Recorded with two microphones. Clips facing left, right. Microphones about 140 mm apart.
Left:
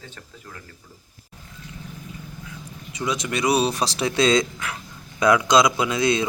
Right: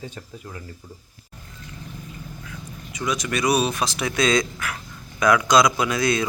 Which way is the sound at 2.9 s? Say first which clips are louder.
Even; 25° left (ahead or behind).